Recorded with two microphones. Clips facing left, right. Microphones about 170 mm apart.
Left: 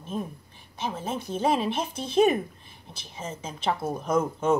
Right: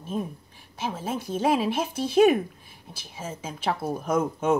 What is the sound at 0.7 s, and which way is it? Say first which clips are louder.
Speech: right 1 dB; 10° right (ahead or behind).